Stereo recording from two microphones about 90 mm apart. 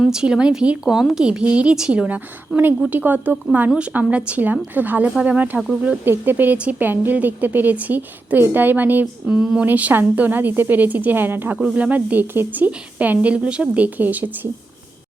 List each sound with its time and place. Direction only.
0.0 s a woman's voice: 5° right (ahead or behind); by 11.5 s 25° right (ahead or behind)
11.5 s speech: 10° right (ahead or behind)